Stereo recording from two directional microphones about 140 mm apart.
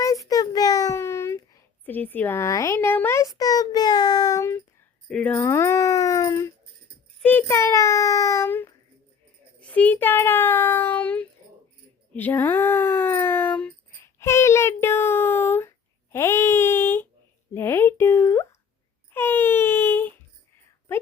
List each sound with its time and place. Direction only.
0.0 s child singing: 25° left (ahead or behind)
1.8 s speech: 10° left (ahead or behind)
5.0 s speech: 5° left (ahead or behind); by 6.5 s 25° left (ahead or behind)
7.2 s a child's voice: 10° left (ahead or behind)
9.6 s child singing: 10° left (ahead or behind)
12.1 s a sound: 15° left (ahead or behind)
16.1 s baby cry: 20° left (ahead or behind)
17.5 s a sound: 15° left (ahead or behind)
19.1 s wail: 15° left (ahead or behind)